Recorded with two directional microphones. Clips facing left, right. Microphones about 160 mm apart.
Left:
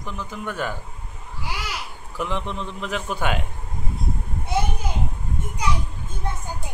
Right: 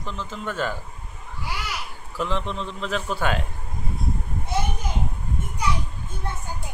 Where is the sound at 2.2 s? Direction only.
15° left (ahead or behind).